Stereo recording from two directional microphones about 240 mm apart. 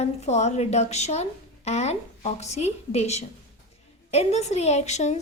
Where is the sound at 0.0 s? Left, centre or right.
Left.